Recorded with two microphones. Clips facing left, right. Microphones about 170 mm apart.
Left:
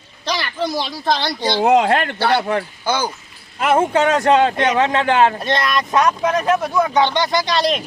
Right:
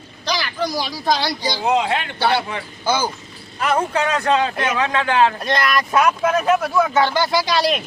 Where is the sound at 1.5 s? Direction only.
55° left (ahead or behind).